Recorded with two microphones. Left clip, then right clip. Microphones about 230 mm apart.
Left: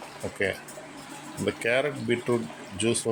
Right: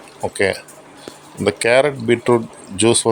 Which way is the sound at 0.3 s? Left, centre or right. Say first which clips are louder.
Right 10 dB; right.